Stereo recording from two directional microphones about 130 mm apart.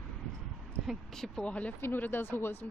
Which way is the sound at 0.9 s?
5° left (ahead or behind).